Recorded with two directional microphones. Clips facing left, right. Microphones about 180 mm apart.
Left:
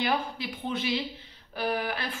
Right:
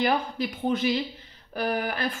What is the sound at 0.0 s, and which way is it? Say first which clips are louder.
A woman's voice: right 4 dB; 45° right (ahead or behind).